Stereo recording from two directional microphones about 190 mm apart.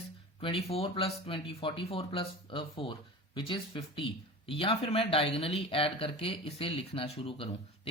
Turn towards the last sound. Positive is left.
turn(degrees=30)  # may be behind; listen again after turning